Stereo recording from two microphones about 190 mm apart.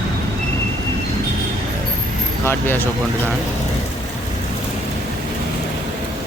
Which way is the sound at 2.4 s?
10° left (ahead or behind).